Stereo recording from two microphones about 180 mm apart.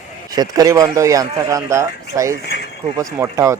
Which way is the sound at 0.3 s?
20° right (ahead or behind).